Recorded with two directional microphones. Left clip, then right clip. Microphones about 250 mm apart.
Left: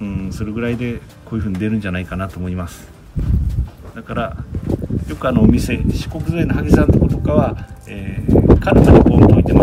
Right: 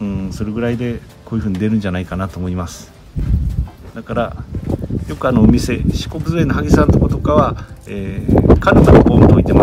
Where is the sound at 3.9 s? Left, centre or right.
Centre.